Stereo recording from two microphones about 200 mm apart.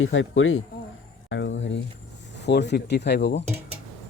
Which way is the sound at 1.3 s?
70° left (ahead or behind).